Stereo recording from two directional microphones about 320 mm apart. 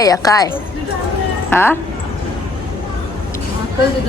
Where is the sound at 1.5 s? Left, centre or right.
Centre.